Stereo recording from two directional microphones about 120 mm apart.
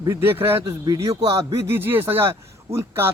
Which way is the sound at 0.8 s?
30° right (ahead or behind).